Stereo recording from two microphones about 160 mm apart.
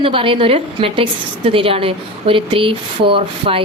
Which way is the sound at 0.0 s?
35° right (ahead or behind).